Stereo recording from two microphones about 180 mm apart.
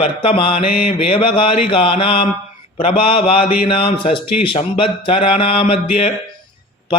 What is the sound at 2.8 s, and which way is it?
Mantra, 30° left (ahead or behind).